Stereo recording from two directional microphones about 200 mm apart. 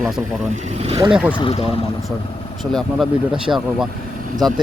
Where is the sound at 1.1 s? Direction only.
5° right (ahead or behind).